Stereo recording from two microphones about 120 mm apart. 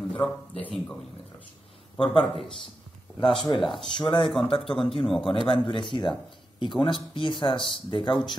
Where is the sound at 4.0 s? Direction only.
45° left (ahead or behind).